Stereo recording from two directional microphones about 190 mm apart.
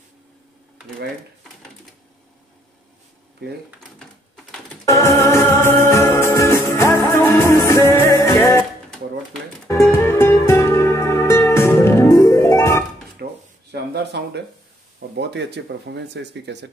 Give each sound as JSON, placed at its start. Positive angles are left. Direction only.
{"t": 4.8, "sound": "music", "side_deg": 15}
{"t": 9.8, "sound": "music", "side_deg": 10}
{"t": 13.2, "sound": "a sound", "side_deg": -60}
{"t": 15.1, "sound": "speech", "side_deg": -65}